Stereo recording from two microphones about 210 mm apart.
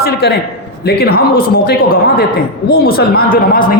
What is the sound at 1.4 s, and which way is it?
A man's voice, 45° left (ahead or behind).